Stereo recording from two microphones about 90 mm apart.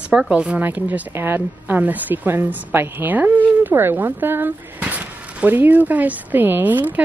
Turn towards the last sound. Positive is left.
turn(degrees=-20)  # may be behind; listen again after turning